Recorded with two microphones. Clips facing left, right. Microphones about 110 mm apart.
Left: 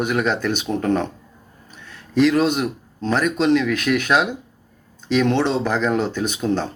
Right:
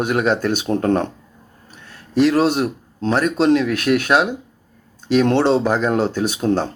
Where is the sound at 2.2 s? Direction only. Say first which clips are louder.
Right 2 dB; 35° right (ahead or behind).